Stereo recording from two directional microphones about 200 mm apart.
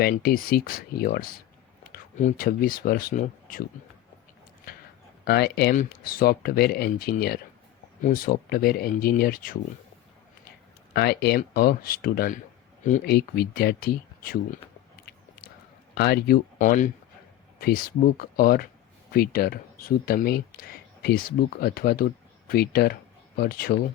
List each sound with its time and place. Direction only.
0.0 s speech: 50° left (ahead or behind)
5.2 s speech: 55° left (ahead or behind)
10.9 s speech: 55° left (ahead or behind)
16.0 s speech: 50° left (ahead or behind)